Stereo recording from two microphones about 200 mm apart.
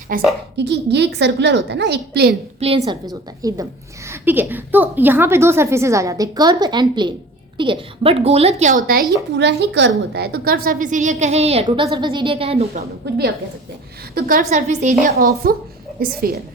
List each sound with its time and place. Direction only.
0.1 s a woman's voice: 45° right (ahead or behind)
0.5 s a woman's voice: 60° right (ahead or behind)
2.6 s a woman's voice: 30° right (ahead or behind)
14.2 s a woman's voice: 45° right (ahead or behind)